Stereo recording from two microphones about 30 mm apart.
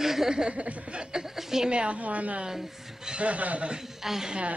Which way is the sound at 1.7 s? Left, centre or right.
Right.